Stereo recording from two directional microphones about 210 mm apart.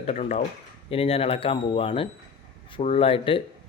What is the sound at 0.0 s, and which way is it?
Speech, 30° left (ahead or behind).